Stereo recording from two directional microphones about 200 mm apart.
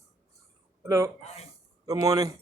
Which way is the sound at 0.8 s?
15° right (ahead or behind).